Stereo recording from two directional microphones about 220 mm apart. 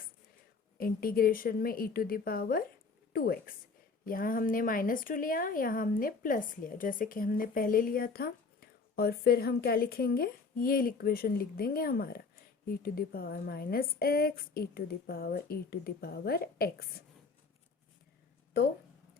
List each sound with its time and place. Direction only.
0.8 s a woman's voice: 40° left (ahead or behind)